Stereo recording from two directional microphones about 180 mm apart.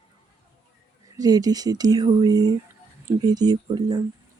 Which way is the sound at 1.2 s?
20° right (ahead or behind).